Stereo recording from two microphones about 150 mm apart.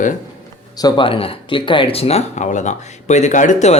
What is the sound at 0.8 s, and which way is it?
Speech, 30° left (ahead or behind).